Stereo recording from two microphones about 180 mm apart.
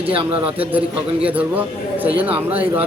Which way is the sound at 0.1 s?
30° right (ahead or behind).